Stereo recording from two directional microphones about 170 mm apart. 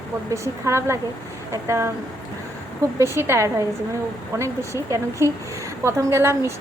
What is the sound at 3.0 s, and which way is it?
Speech, 15° right (ahead or behind).